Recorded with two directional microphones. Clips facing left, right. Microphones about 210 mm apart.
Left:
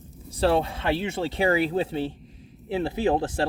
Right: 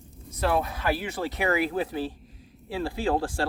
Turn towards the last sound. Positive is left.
turn(degrees=20)  # may be behind; listen again after turning